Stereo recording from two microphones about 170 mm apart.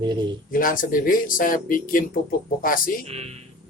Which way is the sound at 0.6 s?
55° left (ahead or behind).